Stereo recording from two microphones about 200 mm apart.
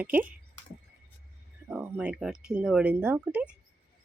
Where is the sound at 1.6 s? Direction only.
10° right (ahead or behind).